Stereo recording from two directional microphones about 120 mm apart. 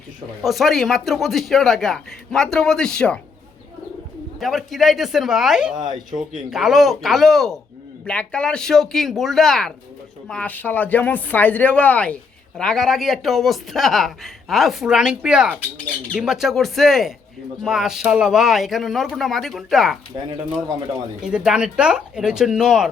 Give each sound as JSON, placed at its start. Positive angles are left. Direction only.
{"t": 0.4, "sound": "speech", "side_deg": 0}
{"t": 4.4, "sound": "speech", "side_deg": 0}
{"t": 5.7, "sound": "speech", "side_deg": -35}
{"t": 6.5, "sound": "speech", "side_deg": 0}
{"t": 21.2, "sound": "speech", "side_deg": -5}